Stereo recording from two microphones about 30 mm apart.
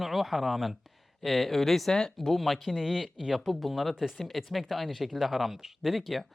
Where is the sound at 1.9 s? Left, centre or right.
Left.